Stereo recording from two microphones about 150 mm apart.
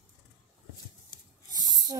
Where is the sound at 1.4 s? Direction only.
25° right (ahead or behind).